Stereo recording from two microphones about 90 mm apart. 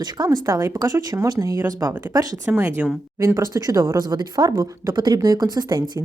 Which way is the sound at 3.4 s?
40° right (ahead or behind).